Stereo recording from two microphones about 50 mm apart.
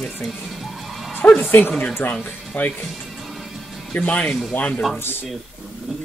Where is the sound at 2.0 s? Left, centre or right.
Left.